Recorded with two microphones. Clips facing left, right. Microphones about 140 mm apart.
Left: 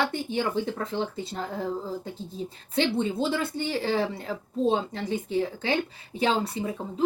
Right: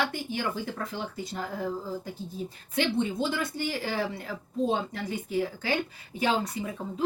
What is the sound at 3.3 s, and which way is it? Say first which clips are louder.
Speech: left 3 dB; 25° left (ahead or behind).